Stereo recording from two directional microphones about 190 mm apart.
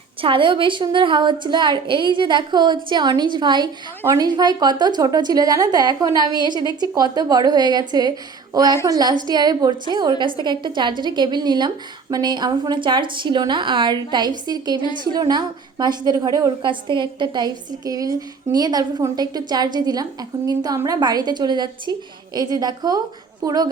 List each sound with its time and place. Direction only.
0.2 s a woman's voice: 25° right (ahead or behind)